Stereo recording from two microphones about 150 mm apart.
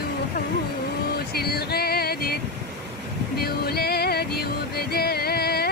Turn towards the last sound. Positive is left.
turn(degrees=90)